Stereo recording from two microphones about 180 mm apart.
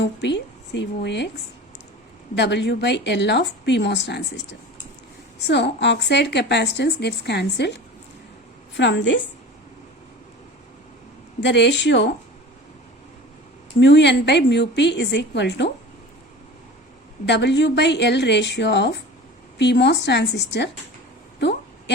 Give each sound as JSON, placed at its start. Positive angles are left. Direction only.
{"t": 0.0, "sound": "a woman's voice", "side_deg": 75}
{"t": 2.3, "sound": "a woman's voice", "side_deg": 75}
{"t": 5.4, "sound": "a woman's voice", "side_deg": 75}
{"t": 11.3, "sound": "a woman's voice", "side_deg": 75}
{"t": 13.7, "sound": "a woman's voice", "side_deg": 80}
{"t": 17.2, "sound": "a woman's voice", "side_deg": 75}